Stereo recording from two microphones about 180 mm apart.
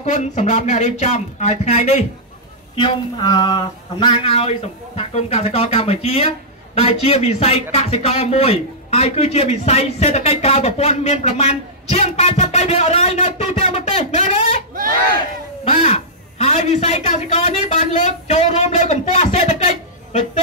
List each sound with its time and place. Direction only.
0.0 s a man's voice: 40° left (ahead or behind)
15.6 s a man's voice: 35° left (ahead or behind)